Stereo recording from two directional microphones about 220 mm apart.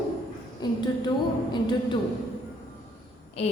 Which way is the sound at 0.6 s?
20° left (ahead or behind).